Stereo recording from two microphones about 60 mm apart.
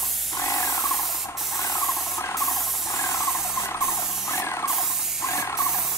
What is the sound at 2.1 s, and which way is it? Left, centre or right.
Spray, left.